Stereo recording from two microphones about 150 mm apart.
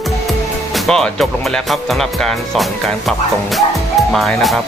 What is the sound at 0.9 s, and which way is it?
Speech, 5° left (ahead or behind).